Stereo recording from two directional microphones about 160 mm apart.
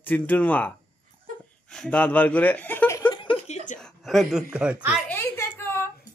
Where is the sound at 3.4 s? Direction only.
45° left (ahead or behind).